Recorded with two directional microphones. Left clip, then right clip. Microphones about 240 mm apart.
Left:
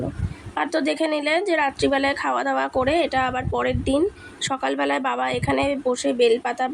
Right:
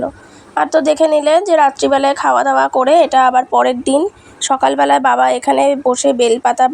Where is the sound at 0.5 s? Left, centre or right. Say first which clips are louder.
Right 11 dB; centre.